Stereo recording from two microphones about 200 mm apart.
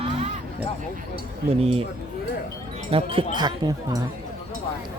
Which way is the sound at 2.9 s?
25° right (ahead or behind).